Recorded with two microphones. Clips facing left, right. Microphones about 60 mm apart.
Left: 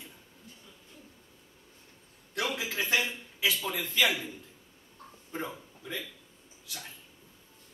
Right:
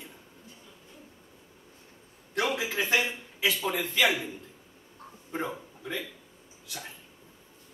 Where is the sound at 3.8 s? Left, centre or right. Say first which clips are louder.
Right 3 dB; centre.